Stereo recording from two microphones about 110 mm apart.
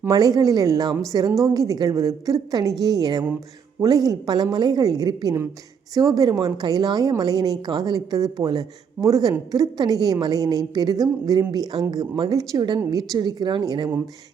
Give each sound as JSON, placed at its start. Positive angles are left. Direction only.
{"t": 0.0, "sound": "a woman's voice", "side_deg": -35}